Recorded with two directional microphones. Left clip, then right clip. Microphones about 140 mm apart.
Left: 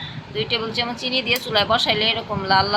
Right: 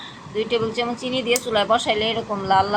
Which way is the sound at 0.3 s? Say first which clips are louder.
Right 1 dB; 20° right (ahead or behind).